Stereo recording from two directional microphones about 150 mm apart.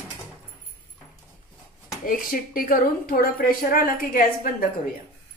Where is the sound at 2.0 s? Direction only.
70° left (ahead or behind).